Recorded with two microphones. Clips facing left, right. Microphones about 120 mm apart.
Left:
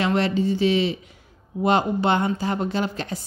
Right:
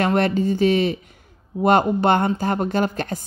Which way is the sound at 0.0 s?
50° right (ahead or behind).